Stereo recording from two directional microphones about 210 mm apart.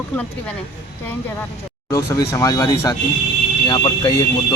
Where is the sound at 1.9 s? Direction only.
15° left (ahead or behind).